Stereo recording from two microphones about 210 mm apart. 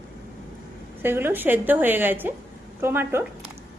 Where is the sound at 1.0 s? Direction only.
10° right (ahead or behind).